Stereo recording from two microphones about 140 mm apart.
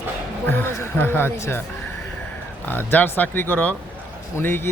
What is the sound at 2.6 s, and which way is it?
A man's voice, 15° left (ahead or behind).